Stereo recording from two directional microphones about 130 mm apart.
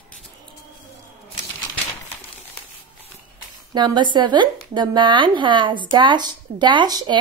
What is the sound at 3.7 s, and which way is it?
Speech, 35° right (ahead or behind).